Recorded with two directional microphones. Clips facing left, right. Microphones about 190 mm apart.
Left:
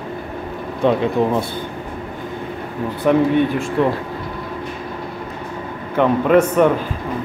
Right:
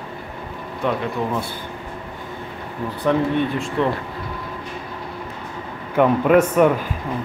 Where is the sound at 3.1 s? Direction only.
10° left (ahead or behind).